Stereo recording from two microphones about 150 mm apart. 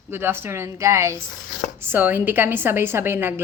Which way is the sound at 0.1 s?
15° right (ahead or behind).